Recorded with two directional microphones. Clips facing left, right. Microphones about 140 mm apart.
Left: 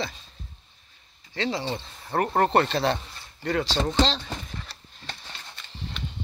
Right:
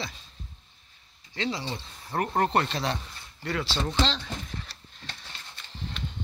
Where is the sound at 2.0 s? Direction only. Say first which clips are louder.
Left 3 dB; 50° left (ahead or behind).